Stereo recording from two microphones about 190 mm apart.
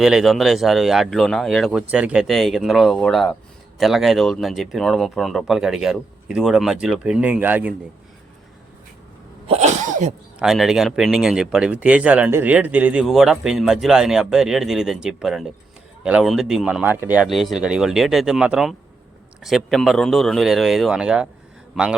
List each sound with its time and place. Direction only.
0.0 s speech: centre (ahead or behind)
9.5 s cough: 35° right (ahead or behind)
10.4 s speech: centre (ahead or behind)